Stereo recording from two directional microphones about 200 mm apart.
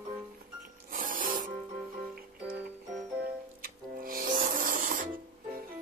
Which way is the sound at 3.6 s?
45° right (ahead or behind).